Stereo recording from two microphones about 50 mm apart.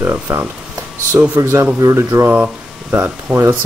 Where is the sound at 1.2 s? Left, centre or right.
Right.